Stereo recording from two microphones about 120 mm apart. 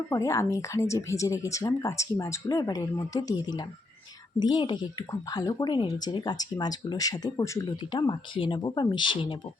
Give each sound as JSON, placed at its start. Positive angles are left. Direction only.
{"t": 0.1, "sound": "speech", "side_deg": 25}
{"t": 7.9, "sound": "speech", "side_deg": 40}